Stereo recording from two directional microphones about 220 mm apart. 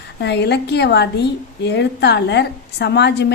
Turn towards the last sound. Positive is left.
turn(degrees=50)  # may be behind; listen again after turning